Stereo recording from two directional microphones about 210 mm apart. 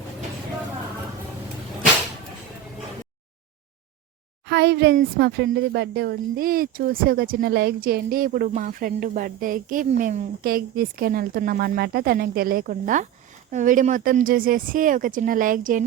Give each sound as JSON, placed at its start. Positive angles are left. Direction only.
{"t": 4.4, "sound": "a woman's voice", "side_deg": -50}